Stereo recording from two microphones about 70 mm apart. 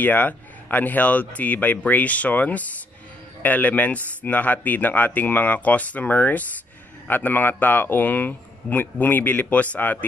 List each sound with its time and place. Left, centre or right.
0.0 s a man's voice: left